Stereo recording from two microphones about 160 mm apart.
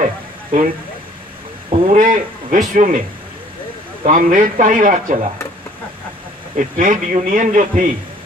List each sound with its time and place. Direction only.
0.0 s vehicle: 50° right (ahead or behind)
1.7 s speech: 35° right (ahead or behind)
2.0 s a man's voice: 55° right (ahead or behind)
4.0 s a man's voice: 55° right (ahead or behind)
6.5 s a man's voice: 50° right (ahead or behind)